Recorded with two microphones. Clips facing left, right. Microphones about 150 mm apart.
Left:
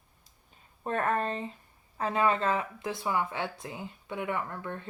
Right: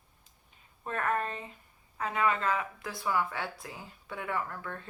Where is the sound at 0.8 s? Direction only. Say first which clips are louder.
Left 3 dB; 30° left (ahead or behind).